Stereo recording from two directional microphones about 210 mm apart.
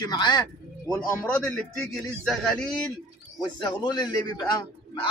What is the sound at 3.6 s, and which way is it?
Speech, 20° left (ahead or behind).